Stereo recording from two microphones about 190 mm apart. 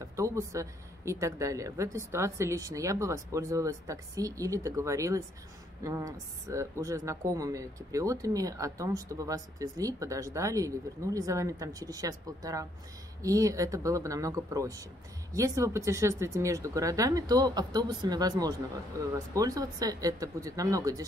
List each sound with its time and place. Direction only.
0.1 s speech: 15° right (ahead or behind)